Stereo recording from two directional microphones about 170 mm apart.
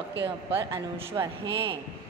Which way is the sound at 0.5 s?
15° right (ahead or behind).